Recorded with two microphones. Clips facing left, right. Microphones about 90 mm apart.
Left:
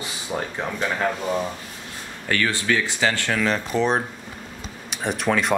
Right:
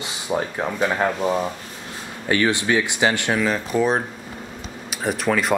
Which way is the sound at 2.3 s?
20° right (ahead or behind).